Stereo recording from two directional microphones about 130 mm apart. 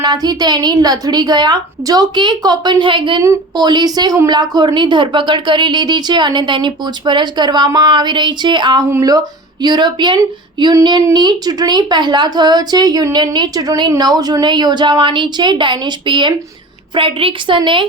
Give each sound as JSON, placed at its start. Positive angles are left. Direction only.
{"t": 0.0, "sound": "a woman's voice", "side_deg": -30}